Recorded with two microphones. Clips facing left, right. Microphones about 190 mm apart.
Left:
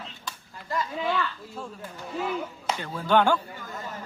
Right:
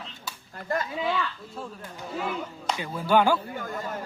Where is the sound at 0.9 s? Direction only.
5° right (ahead or behind).